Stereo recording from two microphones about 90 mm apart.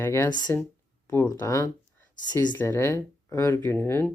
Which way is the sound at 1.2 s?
40° left (ahead or behind).